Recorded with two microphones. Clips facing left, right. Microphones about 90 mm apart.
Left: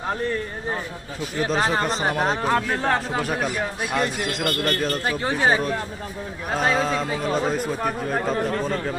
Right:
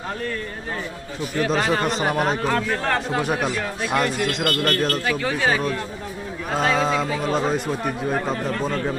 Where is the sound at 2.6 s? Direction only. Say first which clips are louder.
Even; 15° left (ahead or behind).